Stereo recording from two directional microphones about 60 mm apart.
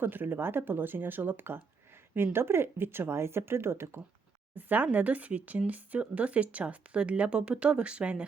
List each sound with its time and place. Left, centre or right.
0.0 s speech: right
4.5 s speech: right